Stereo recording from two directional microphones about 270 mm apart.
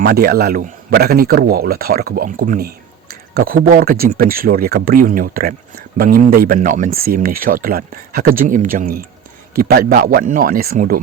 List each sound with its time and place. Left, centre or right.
0.0 s a man's voice: right